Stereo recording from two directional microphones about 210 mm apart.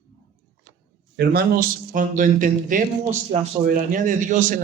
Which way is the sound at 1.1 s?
45° right (ahead or behind).